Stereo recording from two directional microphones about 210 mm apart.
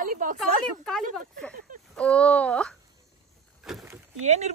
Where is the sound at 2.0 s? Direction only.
5° left (ahead or behind).